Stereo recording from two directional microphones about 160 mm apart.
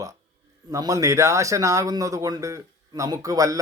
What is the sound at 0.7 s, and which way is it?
Speech, 20° right (ahead or behind).